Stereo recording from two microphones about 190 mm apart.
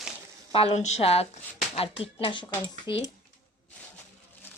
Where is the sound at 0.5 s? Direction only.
30° left (ahead or behind).